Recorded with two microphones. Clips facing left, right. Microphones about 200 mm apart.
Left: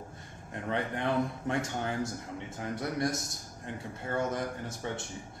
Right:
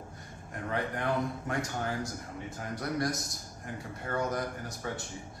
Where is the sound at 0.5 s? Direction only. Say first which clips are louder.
Left 1 dB; 25° left (ahead or behind).